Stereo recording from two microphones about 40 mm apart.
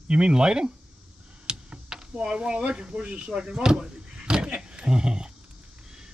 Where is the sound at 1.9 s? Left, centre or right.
Centre.